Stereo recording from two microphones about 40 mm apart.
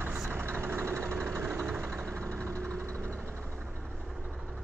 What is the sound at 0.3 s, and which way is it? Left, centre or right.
Vehicle, right.